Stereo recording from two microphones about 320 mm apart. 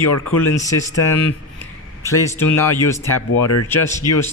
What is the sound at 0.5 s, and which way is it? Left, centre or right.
Speech, centre.